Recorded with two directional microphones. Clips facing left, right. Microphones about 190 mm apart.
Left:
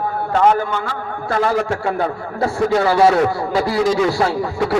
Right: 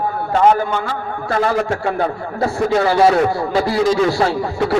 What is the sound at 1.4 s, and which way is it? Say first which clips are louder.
Speech: even; 25° right (ahead or behind).